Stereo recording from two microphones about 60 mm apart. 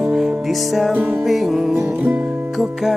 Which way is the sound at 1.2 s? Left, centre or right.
Centre.